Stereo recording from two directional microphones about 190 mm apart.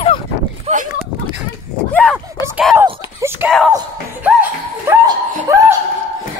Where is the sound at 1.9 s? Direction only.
5° left (ahead or behind).